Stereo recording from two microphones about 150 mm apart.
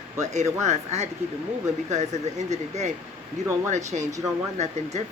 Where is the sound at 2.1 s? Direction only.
50° right (ahead or behind).